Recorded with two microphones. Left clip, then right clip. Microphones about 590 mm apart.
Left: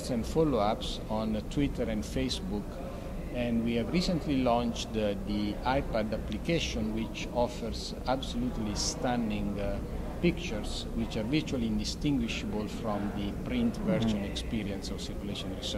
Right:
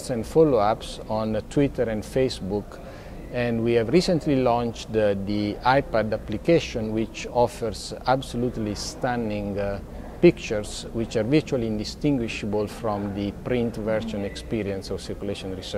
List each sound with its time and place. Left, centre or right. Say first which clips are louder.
0.2 s speech: right 10 dB; right
3.3 s speech: right 10 dB; right